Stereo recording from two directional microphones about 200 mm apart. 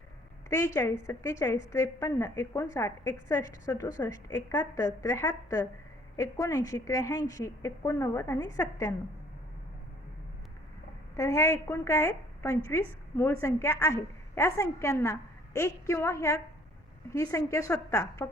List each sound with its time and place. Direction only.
0.5 s a woman's voice: 15° left (ahead or behind)
11.2 s a woman's voice: 15° left (ahead or behind)